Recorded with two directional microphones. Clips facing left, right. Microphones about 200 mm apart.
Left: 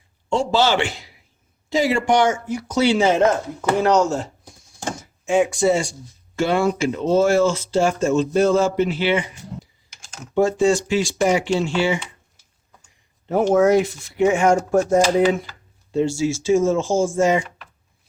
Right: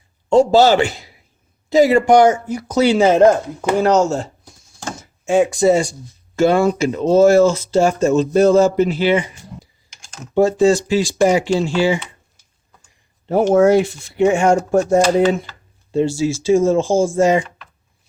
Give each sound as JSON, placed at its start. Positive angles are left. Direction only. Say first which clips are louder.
{"t": 0.3, "sound": "speech", "louder": "right 7 dB", "side_deg": -40}
{"t": 10.3, "sound": "speech", "louder": "right 4 dB", "side_deg": -35}
{"t": 13.2, "sound": "speech", "louder": "right 3 dB", "side_deg": -30}